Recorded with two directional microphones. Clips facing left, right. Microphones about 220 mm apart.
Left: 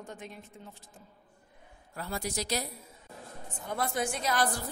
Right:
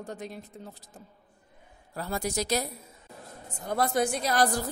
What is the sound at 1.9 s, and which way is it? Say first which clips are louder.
Speech: right 4 dB; 45° right (ahead or behind).